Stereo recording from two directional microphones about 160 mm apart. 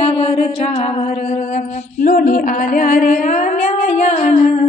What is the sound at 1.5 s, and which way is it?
Music, 60° left (ahead or behind).